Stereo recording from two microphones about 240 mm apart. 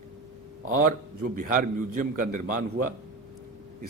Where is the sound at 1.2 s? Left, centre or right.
Right.